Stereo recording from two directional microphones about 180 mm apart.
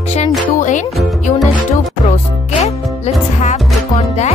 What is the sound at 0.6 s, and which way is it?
Speech, 45° left (ahead or behind).